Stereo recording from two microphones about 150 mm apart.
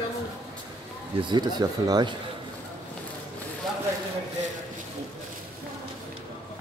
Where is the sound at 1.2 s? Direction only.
30° right (ahead or behind).